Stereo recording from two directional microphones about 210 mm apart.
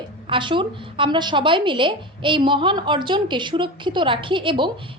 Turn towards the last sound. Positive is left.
turn(degrees=-25)  # may be behind; listen again after turning